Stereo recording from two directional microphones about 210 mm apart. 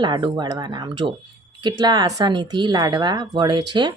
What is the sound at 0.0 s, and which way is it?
Speech, 20° right (ahead or behind).